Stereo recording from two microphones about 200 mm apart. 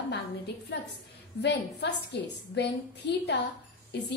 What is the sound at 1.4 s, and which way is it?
A woman's voice, 60° left (ahead or behind).